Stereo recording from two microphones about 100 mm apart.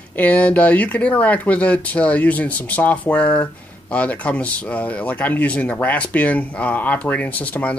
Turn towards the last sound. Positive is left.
turn(degrees=15)  # may be behind; listen again after turning